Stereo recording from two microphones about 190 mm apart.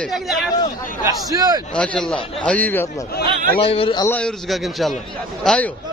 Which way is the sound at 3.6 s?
30° left (ahead or behind).